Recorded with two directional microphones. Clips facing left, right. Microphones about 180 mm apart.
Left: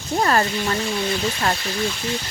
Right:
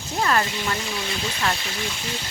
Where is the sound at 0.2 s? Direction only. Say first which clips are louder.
Left 3 dB; 40° left (ahead or behind).